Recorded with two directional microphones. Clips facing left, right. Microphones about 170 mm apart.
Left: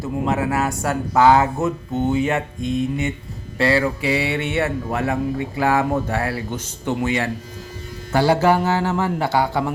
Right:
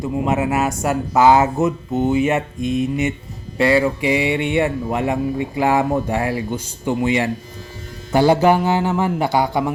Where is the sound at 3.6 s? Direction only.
15° right (ahead or behind).